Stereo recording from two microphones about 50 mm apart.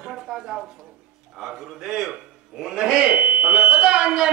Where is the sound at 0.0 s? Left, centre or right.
Centre.